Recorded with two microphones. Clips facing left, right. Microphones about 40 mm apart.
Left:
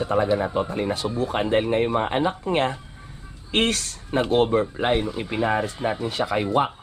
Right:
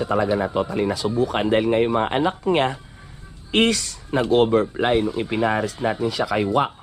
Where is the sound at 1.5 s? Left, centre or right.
Right.